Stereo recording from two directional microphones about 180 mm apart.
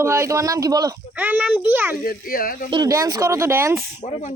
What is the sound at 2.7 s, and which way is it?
Speech, 20° right (ahead or behind).